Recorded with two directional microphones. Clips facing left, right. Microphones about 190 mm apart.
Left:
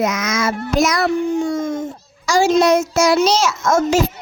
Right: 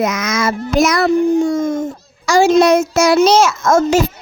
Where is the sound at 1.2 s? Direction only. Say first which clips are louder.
Right 5 dB; 40° right (ahead or behind).